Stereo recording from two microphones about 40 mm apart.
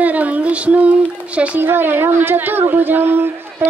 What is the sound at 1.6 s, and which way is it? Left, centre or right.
A woman's voice, right.